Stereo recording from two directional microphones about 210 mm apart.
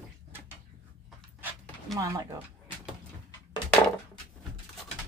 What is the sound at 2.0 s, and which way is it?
Speech, 15° right (ahead or behind).